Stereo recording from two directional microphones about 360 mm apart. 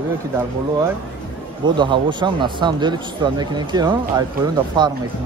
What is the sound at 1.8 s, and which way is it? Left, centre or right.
Speech, centre.